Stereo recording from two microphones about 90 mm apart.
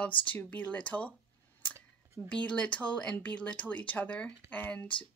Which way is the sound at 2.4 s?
10° left (ahead or behind).